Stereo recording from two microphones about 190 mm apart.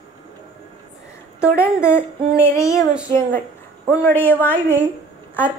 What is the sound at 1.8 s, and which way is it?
Speech, 10° left (ahead or behind).